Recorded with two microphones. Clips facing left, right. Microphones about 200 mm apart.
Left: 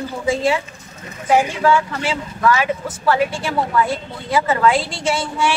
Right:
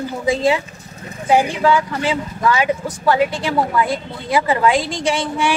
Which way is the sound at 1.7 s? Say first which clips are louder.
Right 1 dB; 20° right (ahead or behind).